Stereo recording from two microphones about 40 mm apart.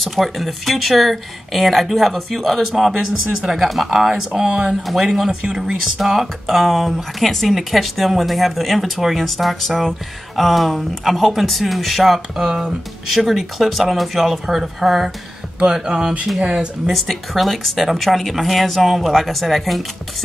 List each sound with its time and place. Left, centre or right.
0.0 s speech: centre
12.4 s speech: centre
13.1 s speech: centre
15.7 s speech: centre
16.8 s speech: centre